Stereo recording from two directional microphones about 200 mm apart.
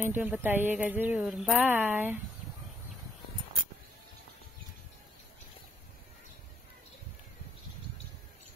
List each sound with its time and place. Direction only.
0.0 s a woman's voice: 10° right (ahead or behind)